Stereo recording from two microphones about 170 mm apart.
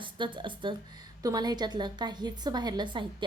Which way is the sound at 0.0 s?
30° right (ahead or behind).